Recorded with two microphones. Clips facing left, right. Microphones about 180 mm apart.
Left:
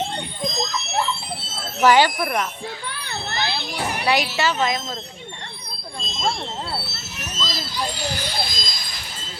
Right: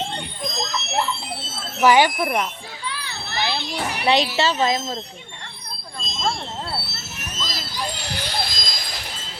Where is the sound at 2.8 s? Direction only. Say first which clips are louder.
Left 1 dB; 55° left (ahead or behind).